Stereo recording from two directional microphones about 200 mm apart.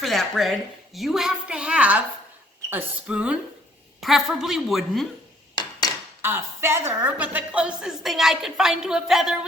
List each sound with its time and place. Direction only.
0.0 s a woman's voice: centre (ahead or behind)
6.2 s a woman's voice: 10° right (ahead or behind)